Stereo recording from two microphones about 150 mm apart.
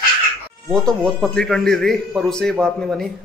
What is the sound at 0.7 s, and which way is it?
Speech, 5° left (ahead or behind).